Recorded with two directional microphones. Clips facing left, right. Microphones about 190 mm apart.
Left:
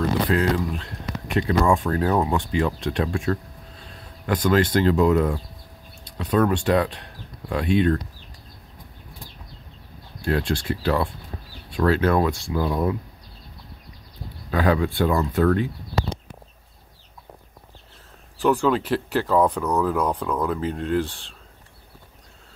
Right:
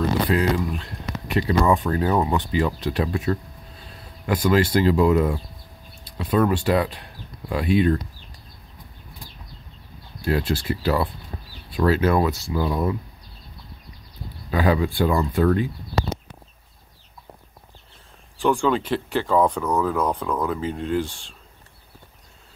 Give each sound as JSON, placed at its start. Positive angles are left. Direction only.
{"t": 0.6, "sound": "speech", "side_deg": 0}
{"t": 10.2, "sound": "speech", "side_deg": -5}
{"t": 14.5, "sound": "speech", "side_deg": -5}
{"t": 18.4, "sound": "speech", "side_deg": 5}